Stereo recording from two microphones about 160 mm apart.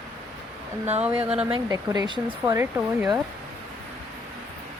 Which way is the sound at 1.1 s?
10° right (ahead or behind).